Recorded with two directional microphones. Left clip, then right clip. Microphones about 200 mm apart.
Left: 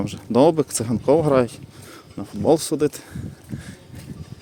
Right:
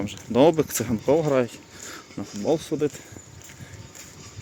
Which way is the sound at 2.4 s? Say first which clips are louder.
Left 6 dB; 30° left (ahead or behind).